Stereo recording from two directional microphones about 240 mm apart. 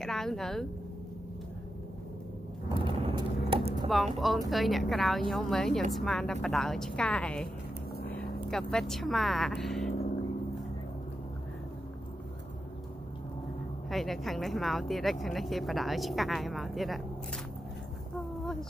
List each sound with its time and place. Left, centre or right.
0.0 s speech: centre
2.7 s a sound: centre
3.4 s typing: right
3.9 s speech: centre
13.8 s speech: centre